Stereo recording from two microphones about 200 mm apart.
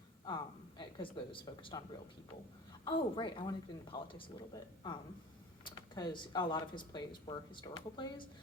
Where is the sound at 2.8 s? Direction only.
25° left (ahead or behind).